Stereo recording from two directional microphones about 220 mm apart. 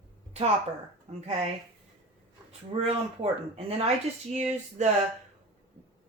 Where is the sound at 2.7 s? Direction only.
25° right (ahead or behind).